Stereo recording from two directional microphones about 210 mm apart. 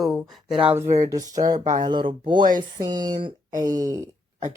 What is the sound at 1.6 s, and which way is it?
Speech, 35° right (ahead or behind).